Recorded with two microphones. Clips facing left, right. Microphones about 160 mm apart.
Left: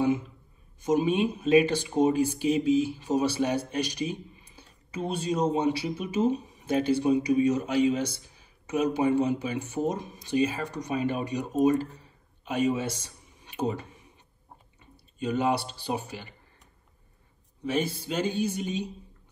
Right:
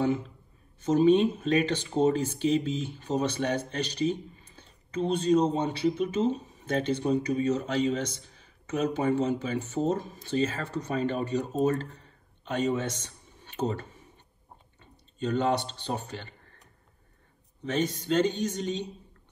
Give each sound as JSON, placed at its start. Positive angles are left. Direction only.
{"t": 0.7, "sound": "speech", "side_deg": 10}
{"t": 17.6, "sound": "speech", "side_deg": 10}